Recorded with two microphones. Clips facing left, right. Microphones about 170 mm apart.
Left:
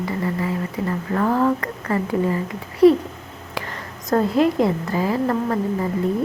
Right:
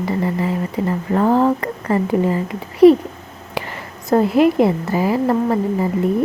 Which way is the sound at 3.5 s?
15° right (ahead or behind).